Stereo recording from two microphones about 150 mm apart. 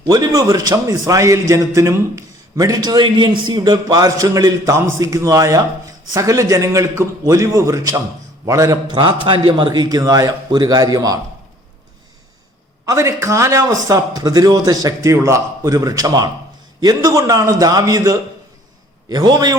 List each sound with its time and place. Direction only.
0.1 s a man's voice: 25° right (ahead or behind)
12.8 s a man's voice: 20° right (ahead or behind)